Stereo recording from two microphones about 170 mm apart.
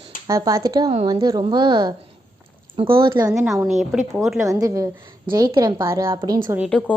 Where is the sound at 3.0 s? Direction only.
25° right (ahead or behind).